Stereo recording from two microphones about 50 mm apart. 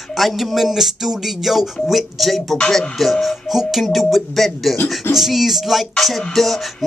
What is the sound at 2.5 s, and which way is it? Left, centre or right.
Speech, centre.